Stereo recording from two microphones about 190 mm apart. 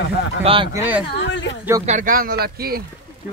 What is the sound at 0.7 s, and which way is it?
Speech, 10° right (ahead or behind).